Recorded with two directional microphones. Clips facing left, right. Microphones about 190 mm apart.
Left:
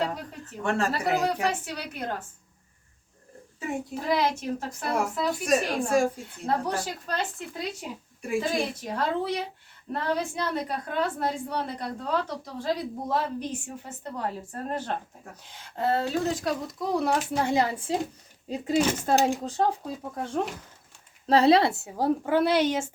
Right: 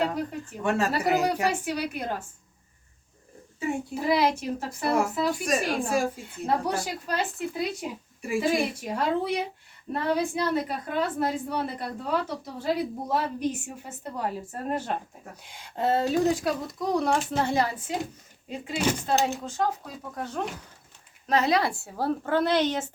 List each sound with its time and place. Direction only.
0.6 s a woman's voice: 5° right (ahead or behind)
3.6 s a child's voice: 5° right (ahead or behind)
15.7 s a child's voice: 20° right (ahead or behind)
16.8 s speech: 5° left (ahead or behind); by 17.9 s 25° left (ahead or behind)
18.4 s speech: 40° left (ahead or behind); by 22.9 s 10° left (ahead or behind)